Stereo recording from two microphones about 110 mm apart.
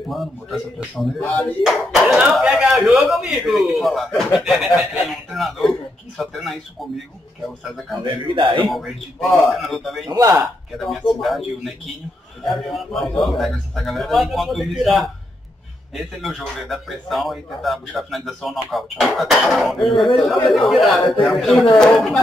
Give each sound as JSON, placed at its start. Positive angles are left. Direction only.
{"t": 0.1, "sound": "speech", "side_deg": 0}
{"t": 8.0, "sound": "a man's voice", "side_deg": -45}
{"t": 8.6, "sound": "speech", "side_deg": 0}
{"t": 10.0, "sound": "a man's voice", "side_deg": -35}
{"t": 10.8, "sound": "speech", "side_deg": 0}